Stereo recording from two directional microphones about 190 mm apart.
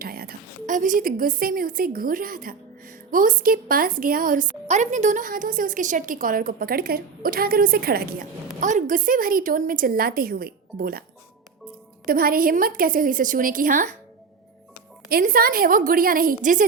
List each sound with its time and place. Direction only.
0.0 s a woman's voice: 50° right (ahead or behind)
8.6 s a woman's voice: 40° right (ahead or behind)
12.0 s a woman's voice: 50° right (ahead or behind)
15.1 s a woman's voice: 50° right (ahead or behind)